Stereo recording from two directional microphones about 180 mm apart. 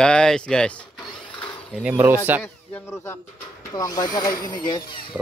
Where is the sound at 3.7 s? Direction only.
20° left (ahead or behind).